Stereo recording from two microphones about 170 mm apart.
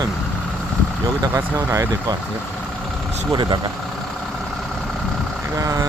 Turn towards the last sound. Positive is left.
turn(degrees=-20)  # may be behind; listen again after turning